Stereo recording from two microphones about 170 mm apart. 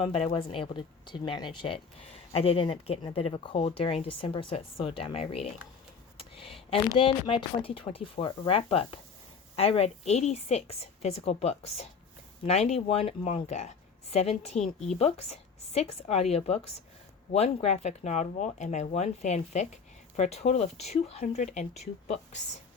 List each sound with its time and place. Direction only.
0.0 s speech: 35° left (ahead or behind)